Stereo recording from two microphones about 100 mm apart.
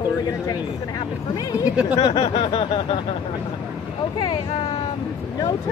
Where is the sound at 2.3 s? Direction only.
60° left (ahead or behind).